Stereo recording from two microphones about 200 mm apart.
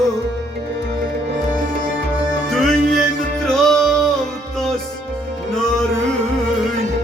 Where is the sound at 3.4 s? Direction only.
Centre (ahead or behind).